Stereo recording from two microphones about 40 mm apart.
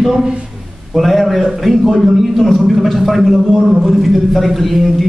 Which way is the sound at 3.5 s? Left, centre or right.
Centre.